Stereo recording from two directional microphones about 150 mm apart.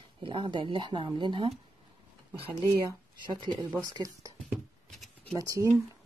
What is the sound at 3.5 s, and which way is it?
Speech, 30° right (ahead or behind).